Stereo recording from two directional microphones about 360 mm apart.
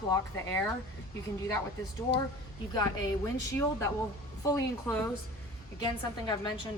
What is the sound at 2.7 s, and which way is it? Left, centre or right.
Speech, centre.